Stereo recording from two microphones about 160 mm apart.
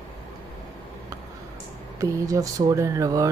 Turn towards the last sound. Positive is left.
turn(degrees=-20)  # may be behind; listen again after turning